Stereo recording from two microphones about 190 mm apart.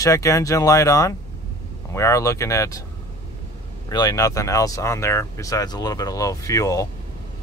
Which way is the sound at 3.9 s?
20° left (ahead or behind).